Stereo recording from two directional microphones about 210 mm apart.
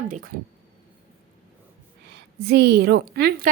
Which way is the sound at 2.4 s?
55° right (ahead or behind).